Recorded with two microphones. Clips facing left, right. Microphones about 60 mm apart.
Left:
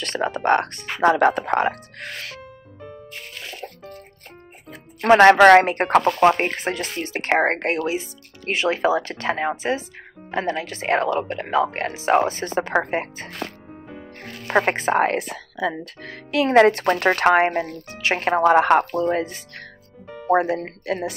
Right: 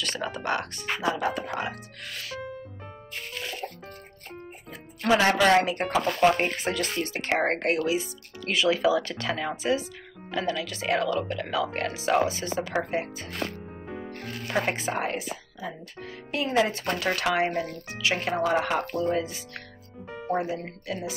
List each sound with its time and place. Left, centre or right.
0.0 s speech: left
5.0 s speech: left
6.7 s speech: left
7.2 s speech: left
14.1 s music: left
14.6 s speech: left
20.2 s speech: left